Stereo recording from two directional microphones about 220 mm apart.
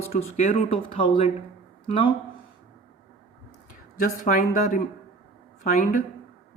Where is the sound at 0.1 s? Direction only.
40° left (ahead or behind).